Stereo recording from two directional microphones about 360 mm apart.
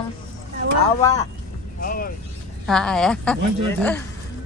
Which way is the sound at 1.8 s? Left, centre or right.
Left.